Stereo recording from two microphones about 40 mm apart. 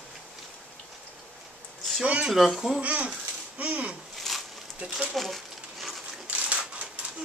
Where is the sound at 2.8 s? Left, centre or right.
Right.